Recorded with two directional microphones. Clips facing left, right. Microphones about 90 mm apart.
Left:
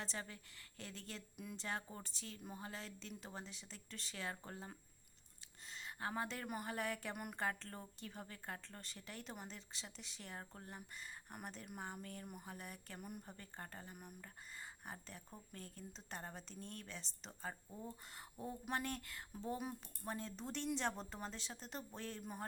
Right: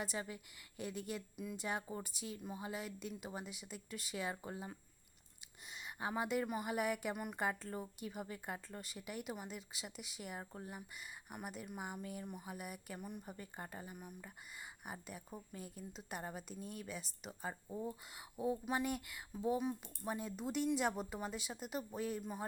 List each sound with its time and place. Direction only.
0.0 s speech: 10° right (ahead or behind)
5.6 s a sound: 15° right (ahead or behind)
6.5 s speech: 10° right (ahead or behind)
13.0 s speech: 5° left (ahead or behind)
13.2 s speech: 10° right (ahead or behind)
13.9 s speech: centre (ahead or behind)